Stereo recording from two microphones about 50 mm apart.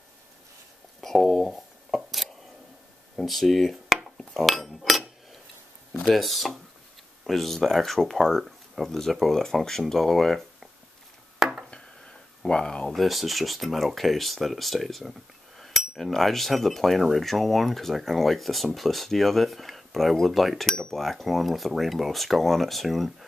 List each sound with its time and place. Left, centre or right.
1.0 s speech: centre
2.0 s a sound: centre
3.2 s speech: centre
4.3 s cutlery: centre
6.0 s speech: centre
11.3 s a sound: centre
12.4 s speech: centre
12.9 s speech: centre